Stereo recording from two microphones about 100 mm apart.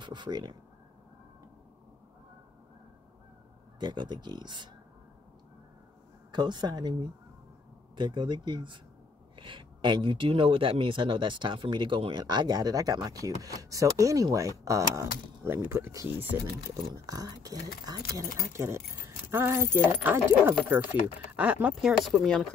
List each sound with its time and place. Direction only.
0.0 s speech: 50° right (ahead or behind)
3.8 s speech: 50° right (ahead or behind)
6.3 s speech: 45° right (ahead or behind); by 16.5 s 25° right (ahead or behind)
17.0 s speech: 35° right (ahead or behind); by 22.5 s 5° left (ahead or behind)